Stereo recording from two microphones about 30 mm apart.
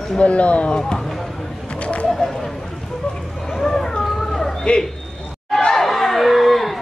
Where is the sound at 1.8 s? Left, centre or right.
Left.